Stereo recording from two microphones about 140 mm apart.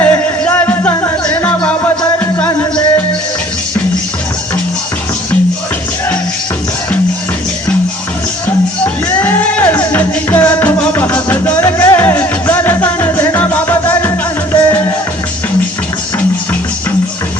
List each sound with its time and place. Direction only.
0.0 s music: 15° left (ahead or behind)
9.0 s music: 15° left (ahead or behind)